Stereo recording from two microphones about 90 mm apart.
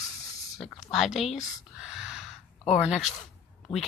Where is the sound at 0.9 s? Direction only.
Centre (ahead or behind).